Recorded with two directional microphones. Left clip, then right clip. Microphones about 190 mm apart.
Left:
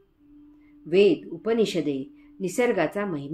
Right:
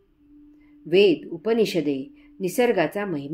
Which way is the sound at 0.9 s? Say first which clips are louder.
Right 2 dB; 40° right (ahead or behind).